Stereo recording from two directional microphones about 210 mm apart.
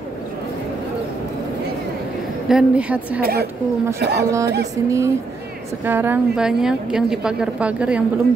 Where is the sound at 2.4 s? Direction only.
5° right (ahead or behind).